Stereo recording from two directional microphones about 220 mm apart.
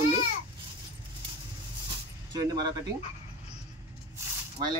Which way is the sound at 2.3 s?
20° right (ahead or behind).